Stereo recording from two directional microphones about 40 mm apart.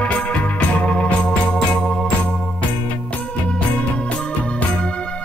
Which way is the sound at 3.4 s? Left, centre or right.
Left.